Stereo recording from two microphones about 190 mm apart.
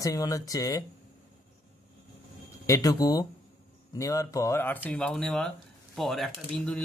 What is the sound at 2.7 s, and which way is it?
Speech, 20° left (ahead or behind).